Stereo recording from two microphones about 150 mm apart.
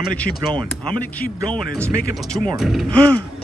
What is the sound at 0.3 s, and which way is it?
Speech, 15° right (ahead or behind).